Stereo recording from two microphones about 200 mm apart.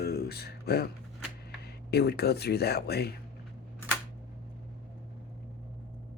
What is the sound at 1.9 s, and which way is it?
Speech, 55° left (ahead or behind).